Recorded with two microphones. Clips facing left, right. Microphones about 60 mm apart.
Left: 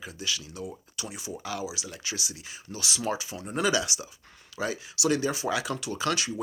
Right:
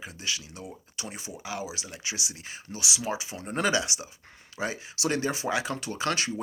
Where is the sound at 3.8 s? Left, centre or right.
Right.